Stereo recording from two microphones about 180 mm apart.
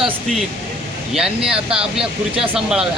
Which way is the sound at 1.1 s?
5° right (ahead or behind).